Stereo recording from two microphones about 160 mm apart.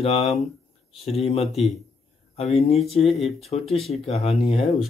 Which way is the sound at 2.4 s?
40° left (ahead or behind).